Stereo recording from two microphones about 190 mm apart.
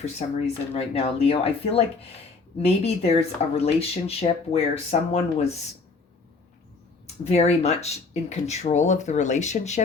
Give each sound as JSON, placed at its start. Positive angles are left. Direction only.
{"t": 0.2, "sound": "speech", "side_deg": 35}
{"t": 7.3, "sound": "speech", "side_deg": 35}